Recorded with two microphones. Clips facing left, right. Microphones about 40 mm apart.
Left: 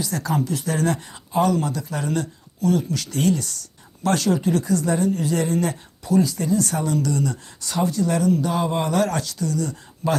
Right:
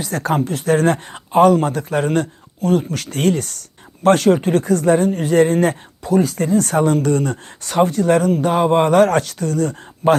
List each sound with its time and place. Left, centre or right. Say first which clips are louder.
0.0 s speech: right 5 dB; right